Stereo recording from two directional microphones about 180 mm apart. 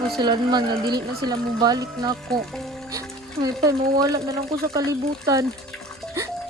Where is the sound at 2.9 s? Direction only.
20° right (ahead or behind).